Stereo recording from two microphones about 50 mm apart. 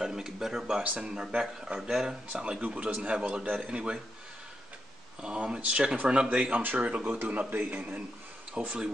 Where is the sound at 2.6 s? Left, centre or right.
Right.